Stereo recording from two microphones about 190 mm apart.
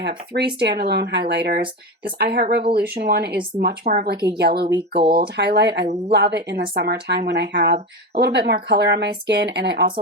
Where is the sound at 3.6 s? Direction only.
45° right (ahead or behind); by 9.8 s 65° right (ahead or behind).